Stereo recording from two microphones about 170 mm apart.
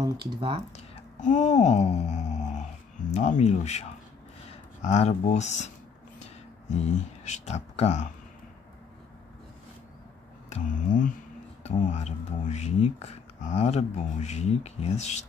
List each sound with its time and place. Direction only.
0.0 s speech: 30° right (ahead or behind)
0.7 s a sound: 45° left (ahead or behind)
3.1 s speech: 45° left (ahead or behind)
6.7 s speech: 45° left (ahead or behind)
10.5 s speech: 50° left (ahead or behind)